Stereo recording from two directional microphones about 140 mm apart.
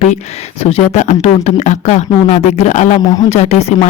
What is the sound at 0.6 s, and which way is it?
Speech, 50° left (ahead or behind).